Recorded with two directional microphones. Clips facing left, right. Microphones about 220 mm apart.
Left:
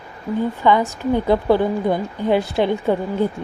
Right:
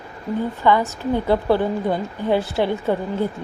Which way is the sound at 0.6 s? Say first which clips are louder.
Left 1 dB; 15° left (ahead or behind).